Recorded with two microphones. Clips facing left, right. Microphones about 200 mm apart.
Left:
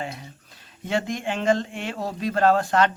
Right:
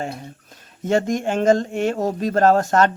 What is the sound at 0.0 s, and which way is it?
Speech, 45° right (ahead or behind).